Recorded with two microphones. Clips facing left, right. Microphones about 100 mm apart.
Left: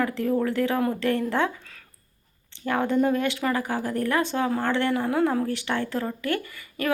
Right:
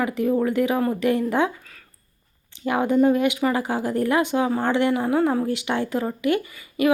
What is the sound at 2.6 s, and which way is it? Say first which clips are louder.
Speech: right 4 dB; 15° right (ahead or behind).